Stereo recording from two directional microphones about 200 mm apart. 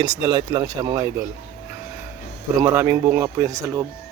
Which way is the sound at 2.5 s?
15° right (ahead or behind).